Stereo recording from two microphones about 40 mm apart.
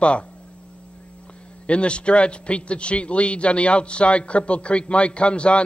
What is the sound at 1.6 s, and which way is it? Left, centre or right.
A man's voice, left.